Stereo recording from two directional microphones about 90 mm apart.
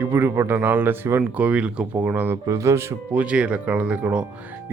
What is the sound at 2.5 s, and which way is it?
Speech, 35° right (ahead or behind).